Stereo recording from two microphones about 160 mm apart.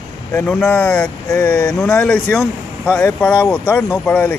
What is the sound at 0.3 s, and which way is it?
Speech, 10° left (ahead or behind).